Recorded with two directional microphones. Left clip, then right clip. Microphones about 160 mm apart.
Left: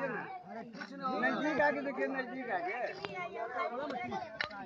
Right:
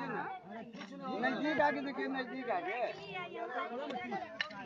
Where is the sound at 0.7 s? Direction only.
10° right (ahead or behind).